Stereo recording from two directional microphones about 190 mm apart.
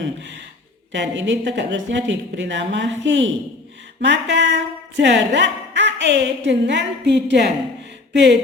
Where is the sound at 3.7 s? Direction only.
70° right (ahead or behind).